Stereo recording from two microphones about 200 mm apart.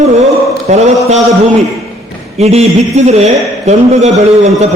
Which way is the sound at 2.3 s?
30° right (ahead or behind).